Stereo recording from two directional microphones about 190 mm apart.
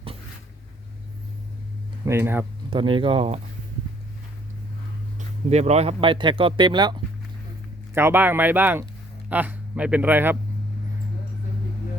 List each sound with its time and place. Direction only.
2.0 s speech: 10° right (ahead or behind)
2.6 s speech: 25° right (ahead or behind)
5.5 s speech: 35° right (ahead or behind)
7.9 s speech: 10° right (ahead or behind)